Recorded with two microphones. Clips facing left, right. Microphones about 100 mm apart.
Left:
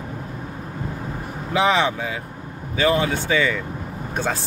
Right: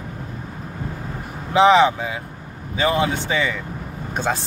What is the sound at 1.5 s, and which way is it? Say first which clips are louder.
Speech: right 6 dB; 20° right (ahead or behind).